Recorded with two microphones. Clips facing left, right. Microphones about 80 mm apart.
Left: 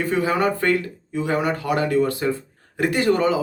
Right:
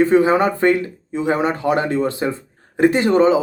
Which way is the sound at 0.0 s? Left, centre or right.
Right.